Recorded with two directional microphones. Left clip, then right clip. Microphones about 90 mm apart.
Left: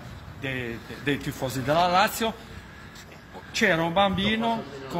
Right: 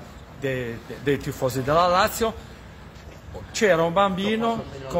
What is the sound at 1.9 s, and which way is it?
Speech, 20° right (ahead or behind).